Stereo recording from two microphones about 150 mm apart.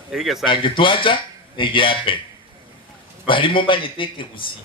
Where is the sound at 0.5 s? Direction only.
35° left (ahead or behind).